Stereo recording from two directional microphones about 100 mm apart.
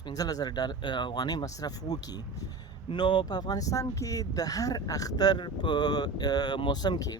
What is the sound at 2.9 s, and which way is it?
Speech, 50° left (ahead or behind).